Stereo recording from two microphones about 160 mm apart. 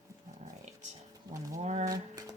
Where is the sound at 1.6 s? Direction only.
45° right (ahead or behind).